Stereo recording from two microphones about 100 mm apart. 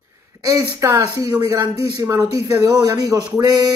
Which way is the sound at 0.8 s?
35° right (ahead or behind).